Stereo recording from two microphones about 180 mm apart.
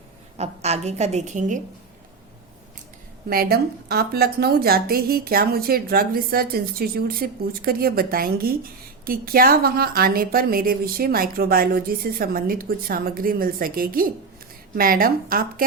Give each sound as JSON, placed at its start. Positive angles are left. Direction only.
{"t": 0.3, "sound": "a woman's voice", "side_deg": -35}
{"t": 3.2, "sound": "a woman's voice", "side_deg": -60}